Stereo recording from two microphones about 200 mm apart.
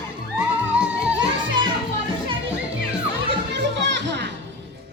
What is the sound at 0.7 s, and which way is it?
Music, 5° right (ahead or behind).